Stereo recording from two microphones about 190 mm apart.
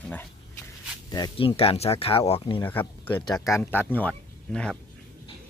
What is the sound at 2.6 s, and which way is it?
Speech, 10° left (ahead or behind).